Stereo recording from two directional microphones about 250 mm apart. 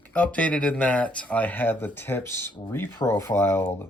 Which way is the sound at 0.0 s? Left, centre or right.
Centre.